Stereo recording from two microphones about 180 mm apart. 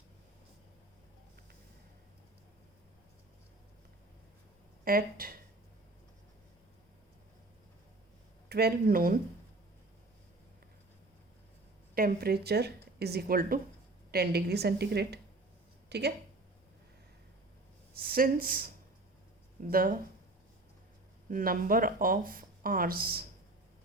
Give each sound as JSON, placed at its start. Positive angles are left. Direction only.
{"t": 4.9, "sound": "speech", "side_deg": -55}
{"t": 8.4, "sound": "speech", "side_deg": -60}
{"t": 11.9, "sound": "speech", "side_deg": -55}
{"t": 17.9, "sound": "speech", "side_deg": -55}
{"t": 19.7, "sound": "speech", "side_deg": -50}
{"t": 21.2, "sound": "speech", "side_deg": -50}